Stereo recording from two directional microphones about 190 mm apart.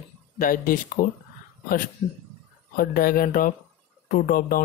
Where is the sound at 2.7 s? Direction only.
50° left (ahead or behind).